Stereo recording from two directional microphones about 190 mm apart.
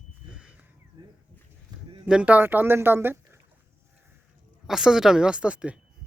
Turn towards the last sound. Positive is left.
turn(degrees=-5)  # may be behind; listen again after turning